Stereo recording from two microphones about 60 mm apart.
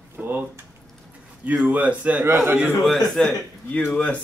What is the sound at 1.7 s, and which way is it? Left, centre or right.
Speech, right.